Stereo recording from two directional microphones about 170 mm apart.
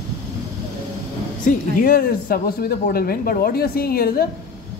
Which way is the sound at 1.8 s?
60° left (ahead or behind).